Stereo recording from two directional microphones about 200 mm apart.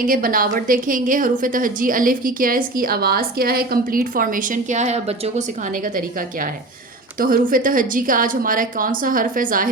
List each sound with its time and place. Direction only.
0.0 s a woman's voice: 45° right (ahead or behind)